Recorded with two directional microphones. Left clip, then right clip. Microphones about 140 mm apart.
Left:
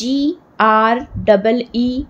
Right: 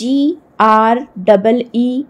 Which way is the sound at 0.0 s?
20° right (ahead or behind).